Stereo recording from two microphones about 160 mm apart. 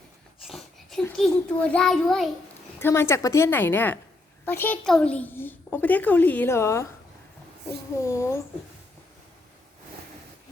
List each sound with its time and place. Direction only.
0.4 s wheeze: centre (ahead or behind)
1.1 s a child's voice: 5° left (ahead or behind)
2.8 s a child's voice: 15° left (ahead or behind)
8.0 s a child's voice: 20° left (ahead or behind)